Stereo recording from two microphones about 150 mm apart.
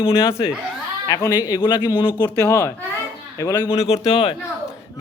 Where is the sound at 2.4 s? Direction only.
20° left (ahead or behind).